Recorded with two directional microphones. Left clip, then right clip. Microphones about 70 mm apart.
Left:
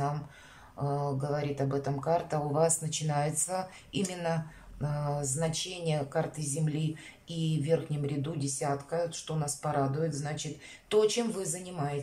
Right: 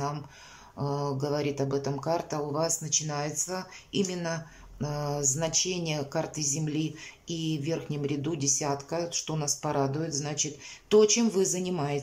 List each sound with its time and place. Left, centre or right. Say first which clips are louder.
0.7 s speech: right 2 dB; centre
4.7 s speech: right 3 dB; centre
11.3 s a woman's voice: right 9 dB; right